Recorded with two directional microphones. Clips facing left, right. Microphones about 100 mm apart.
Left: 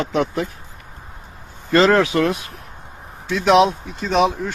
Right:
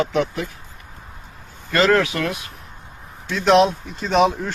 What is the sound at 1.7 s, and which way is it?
Speech, 25° left (ahead or behind).